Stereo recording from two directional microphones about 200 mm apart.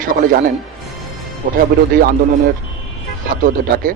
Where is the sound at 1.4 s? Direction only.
40° right (ahead or behind).